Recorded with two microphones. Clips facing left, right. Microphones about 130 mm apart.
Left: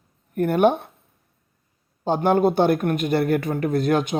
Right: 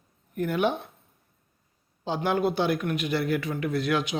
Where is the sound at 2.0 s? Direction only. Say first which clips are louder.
Left 7 dB; 50° left (ahead or behind).